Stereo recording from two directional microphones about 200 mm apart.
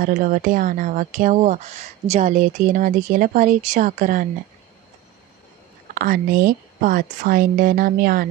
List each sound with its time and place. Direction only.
0.0 s speech: 45° right (ahead or behind)
5.9 s speech: 45° right (ahead or behind)